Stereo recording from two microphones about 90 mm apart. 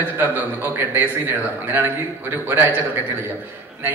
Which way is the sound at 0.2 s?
20° right (ahead or behind).